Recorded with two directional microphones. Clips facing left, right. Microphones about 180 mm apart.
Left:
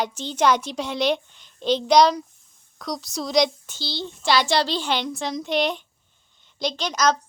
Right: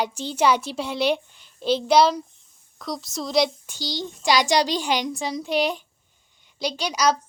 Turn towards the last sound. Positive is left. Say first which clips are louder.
# even
turn(degrees=-10)  # may be behind; listen again after turning